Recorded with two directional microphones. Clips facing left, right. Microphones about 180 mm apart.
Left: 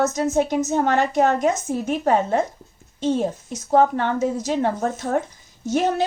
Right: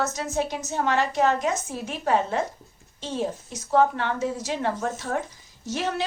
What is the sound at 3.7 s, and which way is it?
Speech, 50° left (ahead or behind).